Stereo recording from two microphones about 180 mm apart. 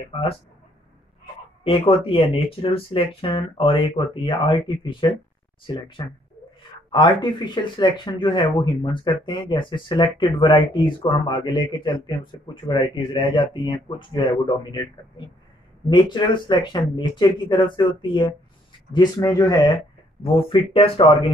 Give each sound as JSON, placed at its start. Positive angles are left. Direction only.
{"t": 1.6, "sound": "speech", "side_deg": 30}